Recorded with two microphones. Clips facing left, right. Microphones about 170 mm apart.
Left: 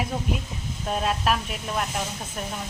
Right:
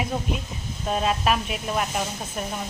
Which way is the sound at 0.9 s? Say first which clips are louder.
Right 2 dB; centre (ahead or behind).